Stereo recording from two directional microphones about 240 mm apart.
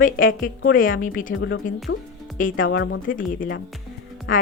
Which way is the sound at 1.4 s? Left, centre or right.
Left.